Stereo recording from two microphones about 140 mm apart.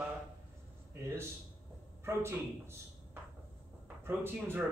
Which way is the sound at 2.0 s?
20° right (ahead or behind).